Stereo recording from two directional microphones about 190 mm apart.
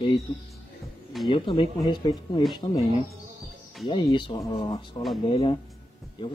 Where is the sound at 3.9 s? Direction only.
20° left (ahead or behind).